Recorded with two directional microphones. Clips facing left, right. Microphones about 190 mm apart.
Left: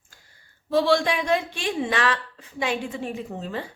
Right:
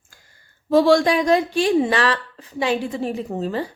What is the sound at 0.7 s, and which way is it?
A woman's voice, 45° right (ahead or behind).